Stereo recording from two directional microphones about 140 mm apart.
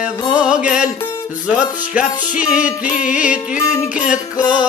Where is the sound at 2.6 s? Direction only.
65° left (ahead or behind).